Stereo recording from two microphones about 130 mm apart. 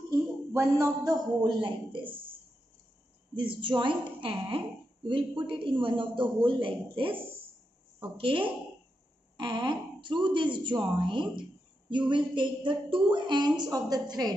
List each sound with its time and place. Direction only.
0.1 s a man's voice: 25° right (ahead or behind); by 2.3 s 40° right (ahead or behind)
3.3 s a man's voice: 40° right (ahead or behind)